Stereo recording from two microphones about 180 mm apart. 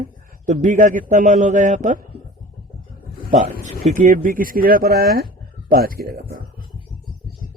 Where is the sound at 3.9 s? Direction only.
50° right (ahead or behind).